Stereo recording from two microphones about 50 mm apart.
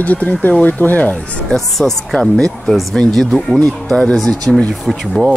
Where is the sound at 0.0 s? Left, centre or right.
Left.